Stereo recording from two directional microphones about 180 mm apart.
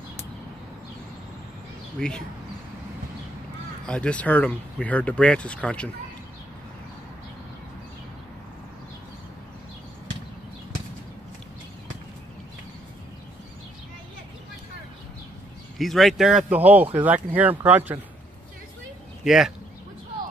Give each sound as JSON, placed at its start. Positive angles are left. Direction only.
{"t": 2.0, "sound": "speech", "side_deg": 5}
{"t": 3.8, "sound": "speech", "side_deg": 5}
{"t": 15.8, "sound": "speech", "side_deg": 0}
{"t": 19.2, "sound": "speech", "side_deg": 0}